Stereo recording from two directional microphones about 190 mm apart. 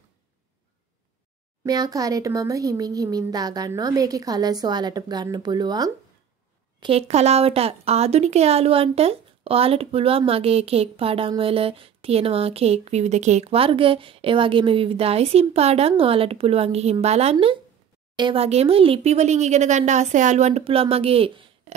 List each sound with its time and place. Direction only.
1.6 s speech: 20° right (ahead or behind)
6.8 s speech: 30° right (ahead or behind)